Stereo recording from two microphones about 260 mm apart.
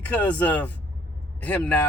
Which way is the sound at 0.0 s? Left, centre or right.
Centre.